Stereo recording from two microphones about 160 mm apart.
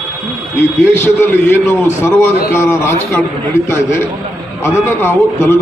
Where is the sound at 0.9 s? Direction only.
15° left (ahead or behind).